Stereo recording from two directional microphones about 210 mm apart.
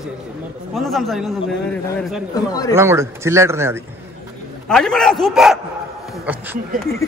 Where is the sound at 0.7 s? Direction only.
Centre (ahead or behind).